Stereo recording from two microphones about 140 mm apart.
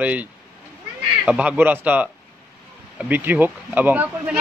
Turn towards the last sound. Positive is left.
turn(degrees=-10)  # may be behind; listen again after turning